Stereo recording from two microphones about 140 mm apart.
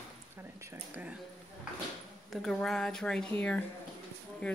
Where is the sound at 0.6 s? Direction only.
20° right (ahead or behind).